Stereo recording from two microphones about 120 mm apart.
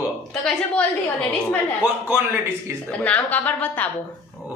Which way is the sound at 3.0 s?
15° left (ahead or behind).